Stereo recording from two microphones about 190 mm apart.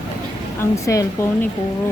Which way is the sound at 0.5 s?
15° left (ahead or behind).